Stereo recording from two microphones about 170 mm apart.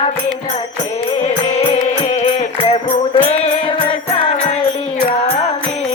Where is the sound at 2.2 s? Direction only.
35° left (ahead or behind).